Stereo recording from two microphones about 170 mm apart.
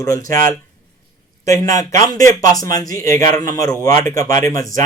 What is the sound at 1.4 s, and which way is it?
Speech, 20° left (ahead or behind).